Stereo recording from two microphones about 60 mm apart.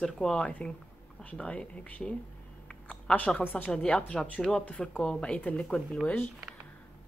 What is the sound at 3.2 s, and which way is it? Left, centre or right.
Speech, left.